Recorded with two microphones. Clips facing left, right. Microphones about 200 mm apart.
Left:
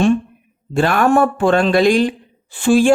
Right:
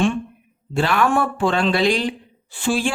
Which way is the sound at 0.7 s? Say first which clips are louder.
Left 5 dB; 50° left (ahead or behind).